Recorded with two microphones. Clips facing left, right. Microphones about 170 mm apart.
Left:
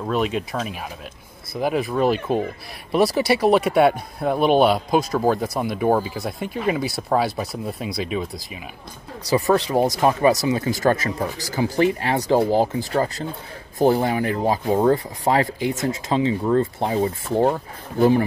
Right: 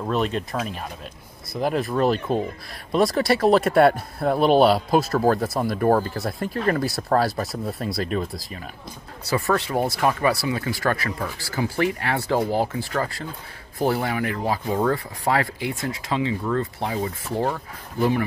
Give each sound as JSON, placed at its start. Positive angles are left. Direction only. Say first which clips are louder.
{"t": 0.0, "sound": "speech", "louder": "left 1 dB", "side_deg": 5}
{"t": 9.3, "sound": "speech", "louder": "left 4 dB", "side_deg": 15}